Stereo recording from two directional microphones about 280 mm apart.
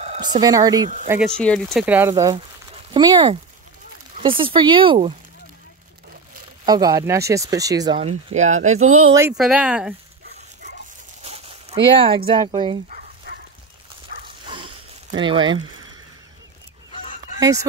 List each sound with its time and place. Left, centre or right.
0.0 s speech: centre
1.2 s speech: centre
6.6 s speech: centre
8.7 s speech: right
9.1 s speech: centre
11.2 s a sound: right
12.3 s speech: centre
14.4 s a sound: centre